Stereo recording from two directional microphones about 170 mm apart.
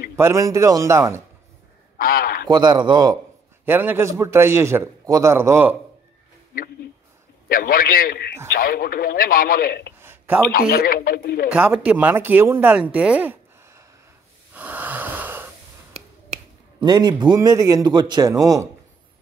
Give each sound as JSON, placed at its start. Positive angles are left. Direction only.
{"t": 0.1, "sound": "a man's voice", "side_deg": -15}
{"t": 2.0, "sound": "honk", "side_deg": 60}
{"t": 2.4, "sound": "a man's voice", "side_deg": -25}
{"t": 3.6, "sound": "a man's voice", "side_deg": -10}
{"t": 7.4, "sound": "speech", "side_deg": 60}
{"t": 9.9, "sound": "a sound", "side_deg": -10}
{"t": 10.5, "sound": "speech", "side_deg": 60}
{"t": 11.5, "sound": "a man's voice", "side_deg": -5}
{"t": 12.9, "sound": "a sound", "side_deg": -10}
{"t": 14.5, "sound": "wheeze", "side_deg": -10}
{"t": 16.8, "sound": "a man's voice", "side_deg": -25}